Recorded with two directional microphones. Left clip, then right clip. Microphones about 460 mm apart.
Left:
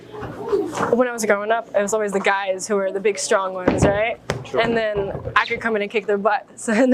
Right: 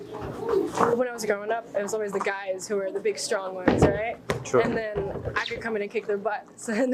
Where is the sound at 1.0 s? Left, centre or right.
Left.